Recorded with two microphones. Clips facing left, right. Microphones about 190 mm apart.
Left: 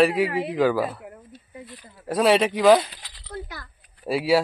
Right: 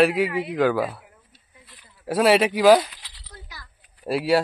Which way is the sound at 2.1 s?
5° right (ahead or behind).